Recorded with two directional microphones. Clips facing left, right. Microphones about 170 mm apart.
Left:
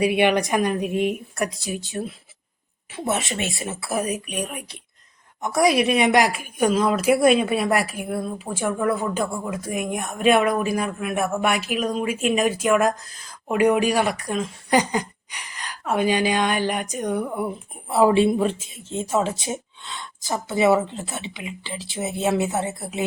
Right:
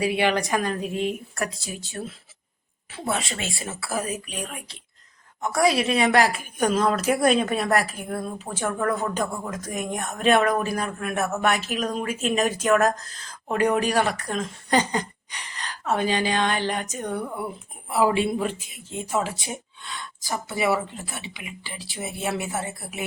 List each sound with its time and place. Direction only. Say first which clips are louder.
0.0 s speech: left 4 dB; 20° left (ahead or behind)
17.8 s speech: left 5 dB; 25° left (ahead or behind)